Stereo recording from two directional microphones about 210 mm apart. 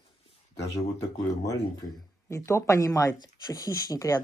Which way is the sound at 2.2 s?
15° left (ahead or behind).